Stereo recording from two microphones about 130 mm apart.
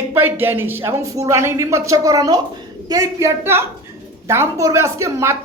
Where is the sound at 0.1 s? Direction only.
15° right (ahead or behind).